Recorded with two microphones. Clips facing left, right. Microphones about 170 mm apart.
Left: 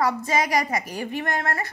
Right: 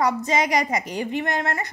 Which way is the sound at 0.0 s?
20° right (ahead or behind).